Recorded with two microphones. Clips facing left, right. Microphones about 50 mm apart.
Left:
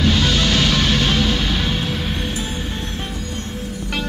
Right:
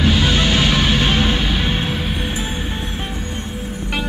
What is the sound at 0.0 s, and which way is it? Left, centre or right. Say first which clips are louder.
Music: right 1 dB; centre.